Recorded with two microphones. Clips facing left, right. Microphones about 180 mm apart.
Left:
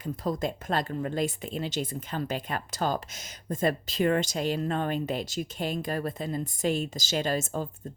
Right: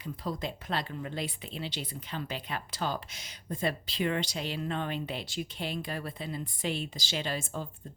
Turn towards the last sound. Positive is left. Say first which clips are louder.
# left 6 dB
turn(degrees=45)  # may be behind; listen again after turning